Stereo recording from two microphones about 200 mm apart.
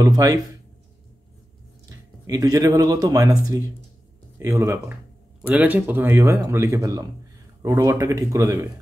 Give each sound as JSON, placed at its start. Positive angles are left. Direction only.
{"t": 0.0, "sound": "speech", "side_deg": -15}
{"t": 2.2, "sound": "speech", "side_deg": -15}